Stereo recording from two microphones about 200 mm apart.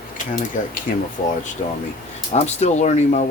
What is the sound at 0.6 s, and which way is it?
Speech, 40° left (ahead or behind).